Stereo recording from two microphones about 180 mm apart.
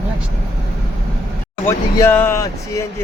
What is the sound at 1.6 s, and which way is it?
Speech, 10° left (ahead or behind).